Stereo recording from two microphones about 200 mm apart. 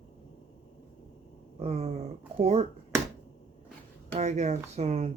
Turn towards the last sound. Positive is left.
turn(degrees=-35)  # may be behind; listen again after turning